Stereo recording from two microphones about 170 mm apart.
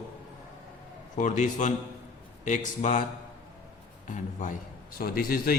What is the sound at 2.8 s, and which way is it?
Speech, 45° left (ahead or behind).